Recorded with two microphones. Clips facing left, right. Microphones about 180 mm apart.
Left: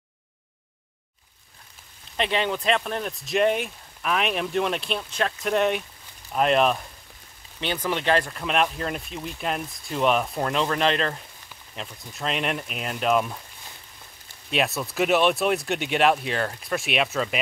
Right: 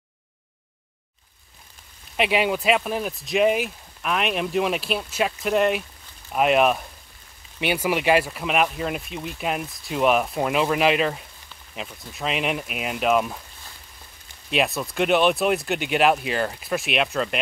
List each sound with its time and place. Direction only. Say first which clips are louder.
2.1 s speech: right 3 dB; 10° right (ahead or behind)
14.5 s speech: right 2 dB; centre (ahead or behind)